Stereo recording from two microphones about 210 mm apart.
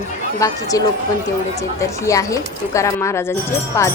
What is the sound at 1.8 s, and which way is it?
Speech, 15° left (ahead or behind).